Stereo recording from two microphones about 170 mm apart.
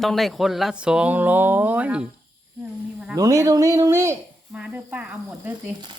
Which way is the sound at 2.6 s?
5° right (ahead or behind).